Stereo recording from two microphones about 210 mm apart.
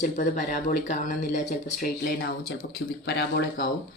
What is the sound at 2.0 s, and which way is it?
Speech, 50° left (ahead or behind).